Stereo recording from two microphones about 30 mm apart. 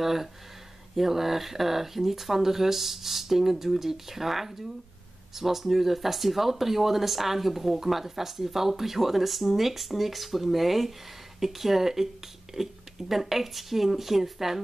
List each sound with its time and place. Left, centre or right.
0.0 s speech: centre